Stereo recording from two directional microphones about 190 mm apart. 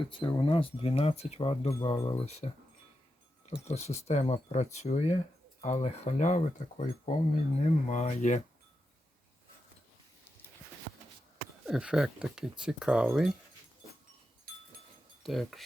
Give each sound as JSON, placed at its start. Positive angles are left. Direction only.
{"t": 0.1, "sound": "speech", "side_deg": 25}
{"t": 11.6, "sound": "speech", "side_deg": -5}
{"t": 15.2, "sound": "speech", "side_deg": 0}